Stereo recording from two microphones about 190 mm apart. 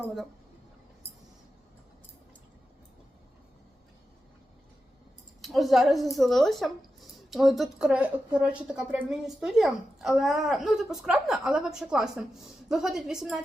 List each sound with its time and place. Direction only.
5.4 s speech: centre (ahead or behind)